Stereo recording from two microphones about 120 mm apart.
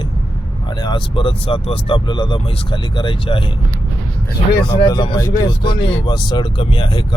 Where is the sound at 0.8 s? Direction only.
40° left (ahead or behind).